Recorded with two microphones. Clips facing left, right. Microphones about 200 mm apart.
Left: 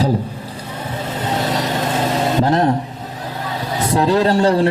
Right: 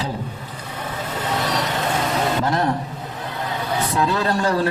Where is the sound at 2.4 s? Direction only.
30° left (ahead or behind).